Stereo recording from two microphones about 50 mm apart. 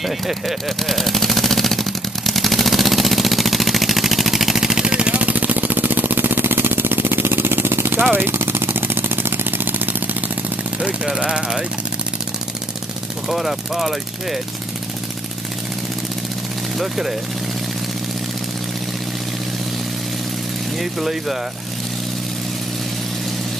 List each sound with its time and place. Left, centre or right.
0.0 s machine gun: centre
5.1 s vehicle: right
11.1 s speech: centre
13.3 s speech: centre
16.7 s speech: centre
20.8 s speech: centre